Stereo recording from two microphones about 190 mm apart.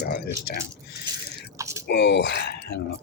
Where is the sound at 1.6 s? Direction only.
15° right (ahead or behind).